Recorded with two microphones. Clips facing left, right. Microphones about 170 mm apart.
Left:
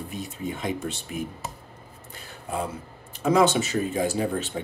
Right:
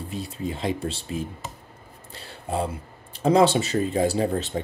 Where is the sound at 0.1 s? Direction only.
30° right (ahead or behind).